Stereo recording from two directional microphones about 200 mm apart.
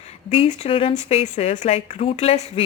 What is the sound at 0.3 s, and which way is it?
A woman's voice, 30° left (ahead or behind).